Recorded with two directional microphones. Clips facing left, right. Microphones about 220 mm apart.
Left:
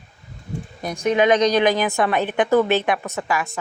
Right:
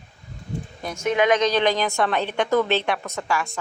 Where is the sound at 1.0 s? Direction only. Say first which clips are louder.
Left 3 dB; 30° left (ahead or behind).